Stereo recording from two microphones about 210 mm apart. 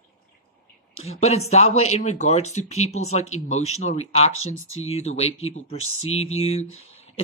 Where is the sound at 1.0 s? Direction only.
30° left (ahead or behind).